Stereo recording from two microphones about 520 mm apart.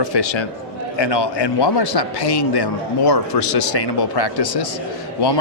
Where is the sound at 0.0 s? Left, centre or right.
Left.